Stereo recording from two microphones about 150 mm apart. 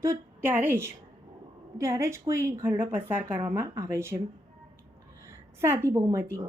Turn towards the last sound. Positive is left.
turn(degrees=-20)  # may be behind; listen again after turning